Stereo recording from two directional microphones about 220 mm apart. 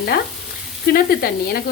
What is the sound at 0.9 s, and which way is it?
Sizzle, 45° left (ahead or behind).